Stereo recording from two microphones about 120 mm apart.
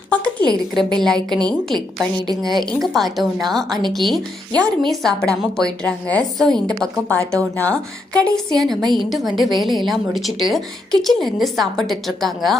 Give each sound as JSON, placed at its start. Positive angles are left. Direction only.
{"t": 0.1, "sound": "a sound", "side_deg": 10}
{"t": 0.9, "sound": "a woman's voice", "side_deg": 5}
{"t": 2.2, "sound": "a woman's voice", "side_deg": -35}
{"t": 2.8, "sound": "a woman's voice", "side_deg": 0}
{"t": 7.2, "sound": "speech", "side_deg": -25}
{"t": 7.5, "sound": "a woman's voice", "side_deg": 10}